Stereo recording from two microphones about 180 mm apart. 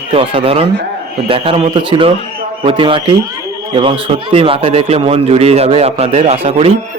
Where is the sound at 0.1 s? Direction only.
30° right (ahead or behind).